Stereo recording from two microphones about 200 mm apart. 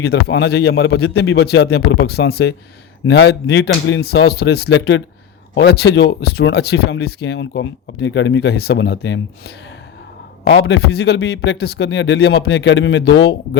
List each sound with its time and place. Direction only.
0.0 s speech: 55° left (ahead or behind)
10.5 s speech: 55° left (ahead or behind)